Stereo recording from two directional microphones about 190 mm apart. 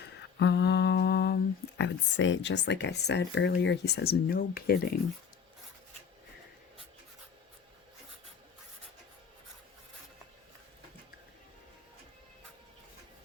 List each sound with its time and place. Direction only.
0.2 s humming: 60° left (ahead or behind)
1.8 s speech: 70° left (ahead or behind); by 4.9 s 55° left (ahead or behind)